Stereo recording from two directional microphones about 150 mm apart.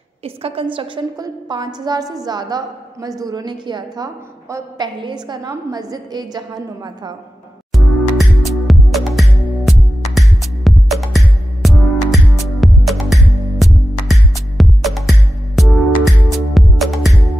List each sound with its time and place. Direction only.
0.2 s a woman's voice: 40° right (ahead or behind)
7.7 s music: centre (ahead or behind)